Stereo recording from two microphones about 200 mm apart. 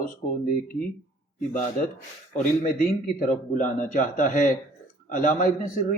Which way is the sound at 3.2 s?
40° left (ahead or behind).